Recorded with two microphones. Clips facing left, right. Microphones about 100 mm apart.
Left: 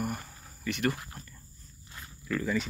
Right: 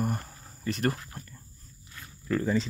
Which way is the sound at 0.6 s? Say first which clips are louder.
Right 1 dB; 35° right (ahead or behind).